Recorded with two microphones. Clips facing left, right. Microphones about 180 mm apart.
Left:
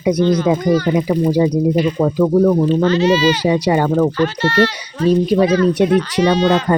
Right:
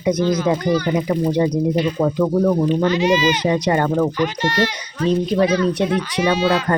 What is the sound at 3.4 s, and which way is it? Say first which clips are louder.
Speech: left 3 dB; 10° left (ahead or behind).